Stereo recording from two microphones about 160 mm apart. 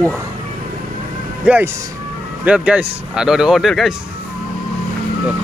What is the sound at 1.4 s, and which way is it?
Music, 10° right (ahead or behind).